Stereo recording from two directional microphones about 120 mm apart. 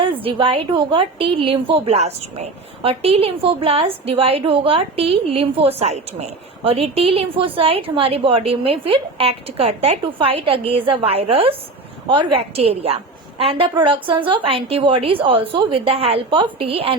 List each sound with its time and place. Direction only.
0.0 s a woman's voice: 50° right (ahead or behind)
12.0 s a woman's voice: 45° right (ahead or behind)